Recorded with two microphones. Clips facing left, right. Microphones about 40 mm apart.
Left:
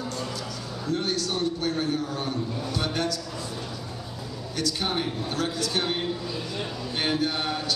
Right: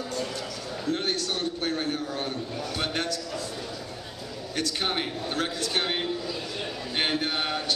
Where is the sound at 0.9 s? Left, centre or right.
Right.